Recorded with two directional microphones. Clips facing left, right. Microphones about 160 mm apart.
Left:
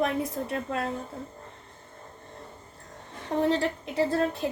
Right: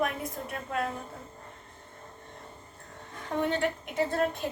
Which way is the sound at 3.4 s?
30° left (ahead or behind).